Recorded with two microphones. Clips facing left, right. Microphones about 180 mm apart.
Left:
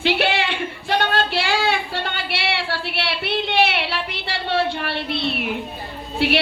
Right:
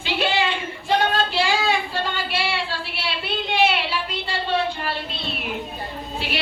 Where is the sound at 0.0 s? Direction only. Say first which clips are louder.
Left 2 dB; 70° left (ahead or behind).